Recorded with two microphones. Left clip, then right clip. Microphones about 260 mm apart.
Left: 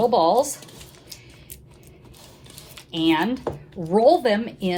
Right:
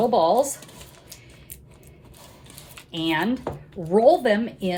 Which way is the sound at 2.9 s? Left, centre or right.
Left.